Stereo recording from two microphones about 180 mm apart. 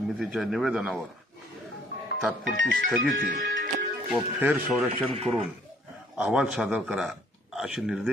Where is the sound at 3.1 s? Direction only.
50° right (ahead or behind).